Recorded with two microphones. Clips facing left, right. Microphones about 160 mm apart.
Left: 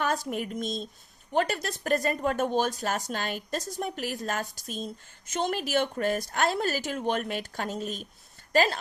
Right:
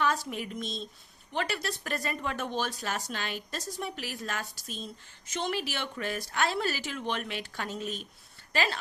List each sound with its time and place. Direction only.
0.0 s speech: 45° left (ahead or behind)